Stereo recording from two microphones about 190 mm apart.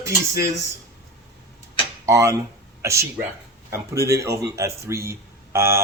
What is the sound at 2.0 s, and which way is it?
Speech, 15° right (ahead or behind).